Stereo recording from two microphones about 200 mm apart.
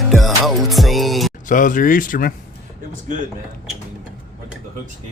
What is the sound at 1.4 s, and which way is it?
Speech, 40° left (ahead or behind).